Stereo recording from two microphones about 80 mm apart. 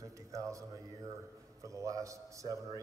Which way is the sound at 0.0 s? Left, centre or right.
Right.